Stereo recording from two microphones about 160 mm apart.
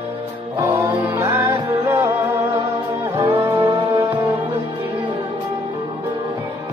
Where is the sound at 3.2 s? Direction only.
35° right (ahead or behind).